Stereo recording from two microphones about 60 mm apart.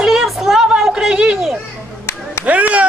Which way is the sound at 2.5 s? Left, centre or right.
Right.